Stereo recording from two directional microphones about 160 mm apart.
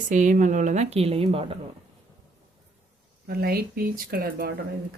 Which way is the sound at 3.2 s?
75° right (ahead or behind).